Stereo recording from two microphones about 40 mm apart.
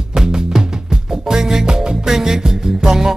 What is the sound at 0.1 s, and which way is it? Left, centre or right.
Music, centre.